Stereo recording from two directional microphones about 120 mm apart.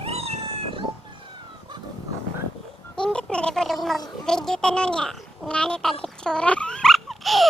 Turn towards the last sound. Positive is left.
turn(degrees=0)  # may be behind; listen again after turning